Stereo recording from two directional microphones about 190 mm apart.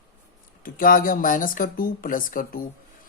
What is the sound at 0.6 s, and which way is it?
Speech, 45° left (ahead or behind).